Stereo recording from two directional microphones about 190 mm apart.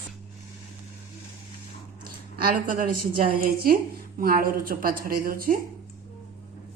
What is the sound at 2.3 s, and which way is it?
A woman's voice, 45° right (ahead or behind).